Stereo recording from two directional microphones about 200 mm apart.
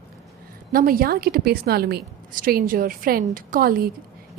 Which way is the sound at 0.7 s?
45° right (ahead or behind).